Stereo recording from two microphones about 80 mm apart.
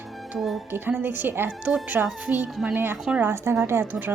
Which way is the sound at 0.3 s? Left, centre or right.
Centre.